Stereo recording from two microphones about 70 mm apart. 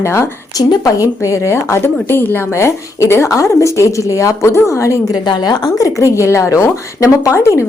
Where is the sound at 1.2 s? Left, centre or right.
Left.